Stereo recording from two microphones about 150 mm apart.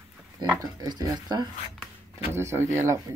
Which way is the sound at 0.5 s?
25° right (ahead or behind).